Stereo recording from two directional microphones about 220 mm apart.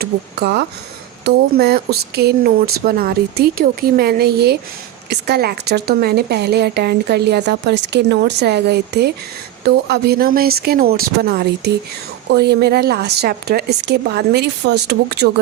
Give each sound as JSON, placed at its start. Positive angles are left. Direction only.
{"t": 0.0, "sound": "speech", "side_deg": -50}